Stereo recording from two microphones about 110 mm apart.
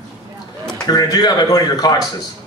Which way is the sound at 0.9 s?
35° left (ahead or behind).